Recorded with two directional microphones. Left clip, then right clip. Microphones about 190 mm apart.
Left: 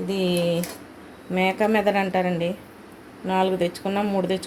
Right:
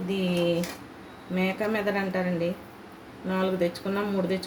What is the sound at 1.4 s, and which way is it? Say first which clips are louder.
Speech: left 7 dB; 50° left (ahead or behind).